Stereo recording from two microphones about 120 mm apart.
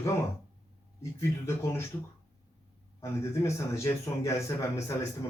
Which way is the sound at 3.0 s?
25° left (ahead or behind).